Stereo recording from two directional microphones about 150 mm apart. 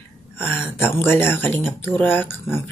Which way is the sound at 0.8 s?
15° left (ahead or behind).